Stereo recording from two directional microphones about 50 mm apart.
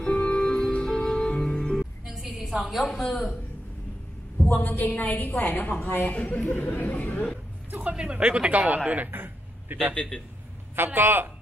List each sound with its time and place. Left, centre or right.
0.0 s music: centre
2.0 s music: centre
2.3 s a sound: centre
2.7 s a woman's voice: centre
4.5 s a woman's voice: left
6.0 s speech: left
7.9 s speech: centre
8.2 s speech: right
9.1 s a sound: right
11.0 s a man's voice: right